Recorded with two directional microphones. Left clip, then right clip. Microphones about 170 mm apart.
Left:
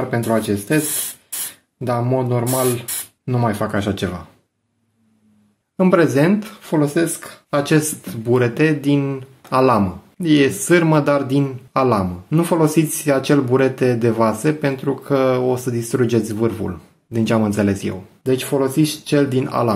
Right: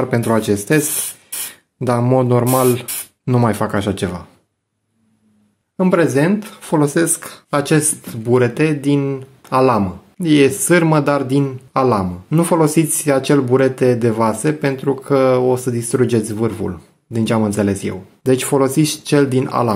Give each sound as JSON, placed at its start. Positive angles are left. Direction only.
{"t": 0.1, "sound": "speech", "side_deg": -45}
{"t": 1.0, "sound": "spray", "side_deg": -10}
{"t": 1.9, "sound": "speech", "side_deg": -45}
{"t": 5.8, "sound": "speech", "side_deg": -10}
{"t": 6.6, "sound": "speech", "side_deg": -35}
{"t": 7.6, "sound": "speech", "side_deg": -25}
{"t": 10.2, "sound": "speech", "side_deg": -25}
{"t": 18.2, "sound": "speech", "side_deg": -40}